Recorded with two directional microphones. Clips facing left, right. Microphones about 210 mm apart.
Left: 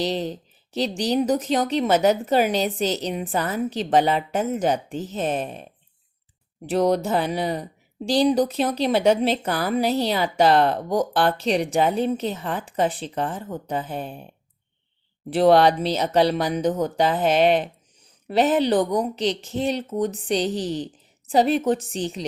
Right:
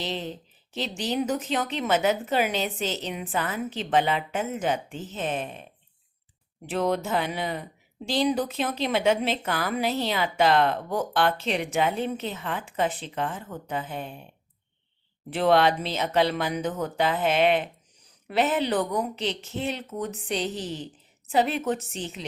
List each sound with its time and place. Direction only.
0.0 s a woman's voice: 40° left (ahead or behind)
6.7 s a woman's voice: 40° left (ahead or behind)
15.3 s a woman's voice: 35° left (ahead or behind)